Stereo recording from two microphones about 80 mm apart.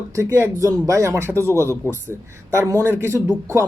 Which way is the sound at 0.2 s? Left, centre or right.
Right.